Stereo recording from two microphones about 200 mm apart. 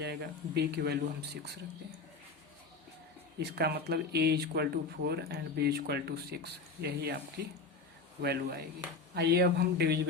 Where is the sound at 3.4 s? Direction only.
55° right (ahead or behind).